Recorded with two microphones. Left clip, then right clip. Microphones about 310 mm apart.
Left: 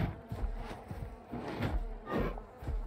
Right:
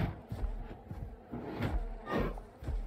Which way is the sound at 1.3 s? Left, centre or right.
Centre.